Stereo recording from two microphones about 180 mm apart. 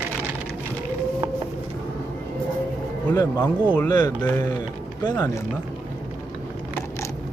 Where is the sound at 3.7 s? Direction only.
10° left (ahead or behind).